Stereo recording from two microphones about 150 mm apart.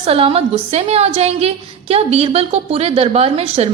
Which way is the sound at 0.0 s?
40° right (ahead or behind).